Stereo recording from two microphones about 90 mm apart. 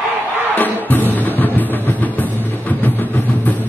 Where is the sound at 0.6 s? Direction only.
20° left (ahead or behind).